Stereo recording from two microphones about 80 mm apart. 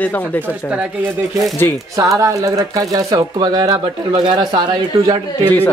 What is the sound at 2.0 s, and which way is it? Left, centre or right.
Speech, right.